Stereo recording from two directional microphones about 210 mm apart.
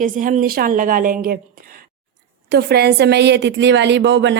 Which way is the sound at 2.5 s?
50° right (ahead or behind).